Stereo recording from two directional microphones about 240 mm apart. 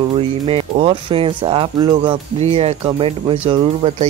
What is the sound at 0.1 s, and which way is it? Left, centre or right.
Speech, right.